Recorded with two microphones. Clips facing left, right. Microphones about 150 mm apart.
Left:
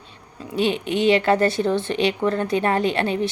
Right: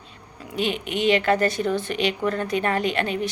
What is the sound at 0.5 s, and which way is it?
A woman's voice, 30° left (ahead or behind).